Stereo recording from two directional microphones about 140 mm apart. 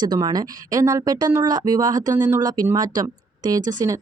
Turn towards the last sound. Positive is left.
turn(degrees=-25)  # may be behind; listen again after turning